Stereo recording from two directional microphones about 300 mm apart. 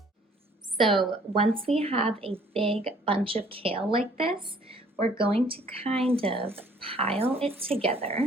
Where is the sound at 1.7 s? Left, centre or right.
Centre.